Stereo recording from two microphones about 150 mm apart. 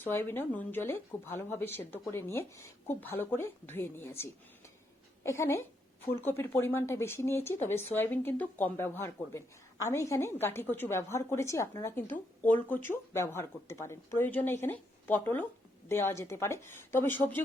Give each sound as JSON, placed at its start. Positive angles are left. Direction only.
{"t": 0.0, "sound": "a woman's voice", "side_deg": 15}